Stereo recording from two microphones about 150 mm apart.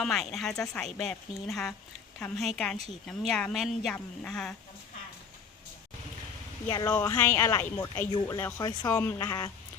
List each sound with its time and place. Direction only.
0.0 s speech: centre (ahead or behind)
6.7 s speech: 25° left (ahead or behind)